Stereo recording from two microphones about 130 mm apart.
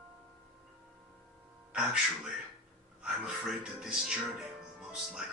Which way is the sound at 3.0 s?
5° right (ahead or behind).